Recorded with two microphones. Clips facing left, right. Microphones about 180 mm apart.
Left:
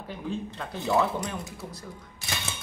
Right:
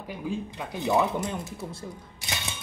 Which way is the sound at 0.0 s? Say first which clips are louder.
Right 1 dB; 10° right (ahead or behind).